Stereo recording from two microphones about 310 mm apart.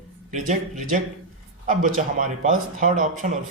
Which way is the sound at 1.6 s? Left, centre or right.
Right.